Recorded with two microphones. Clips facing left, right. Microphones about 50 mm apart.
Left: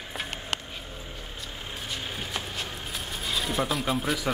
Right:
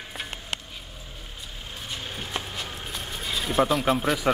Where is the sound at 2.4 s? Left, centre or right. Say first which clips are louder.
Even; centre.